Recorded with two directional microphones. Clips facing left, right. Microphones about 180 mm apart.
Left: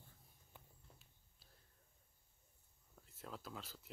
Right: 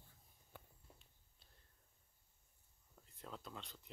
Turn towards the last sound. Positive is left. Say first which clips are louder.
# left 1 dB
turn(degrees=5)  # may be behind; listen again after turning